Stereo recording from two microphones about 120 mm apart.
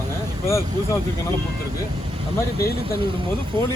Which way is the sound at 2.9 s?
45° right (ahead or behind).